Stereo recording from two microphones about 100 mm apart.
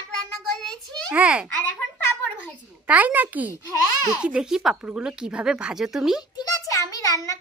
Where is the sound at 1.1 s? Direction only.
10° right (ahead or behind).